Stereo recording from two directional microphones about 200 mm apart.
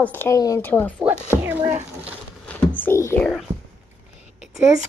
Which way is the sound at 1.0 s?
10° right (ahead or behind).